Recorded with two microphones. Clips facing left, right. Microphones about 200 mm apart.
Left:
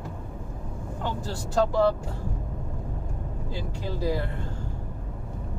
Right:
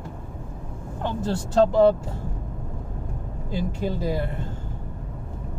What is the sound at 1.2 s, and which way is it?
Speech, 20° right (ahead or behind).